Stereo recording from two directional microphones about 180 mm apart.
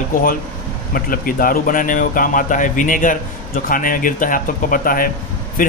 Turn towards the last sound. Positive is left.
turn(degrees=50)  # may be behind; listen again after turning